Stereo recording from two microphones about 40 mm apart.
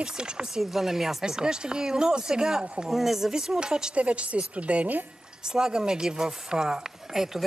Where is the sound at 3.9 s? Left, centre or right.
Right.